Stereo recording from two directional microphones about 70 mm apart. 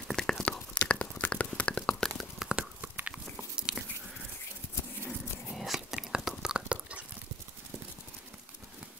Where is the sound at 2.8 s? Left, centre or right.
Right.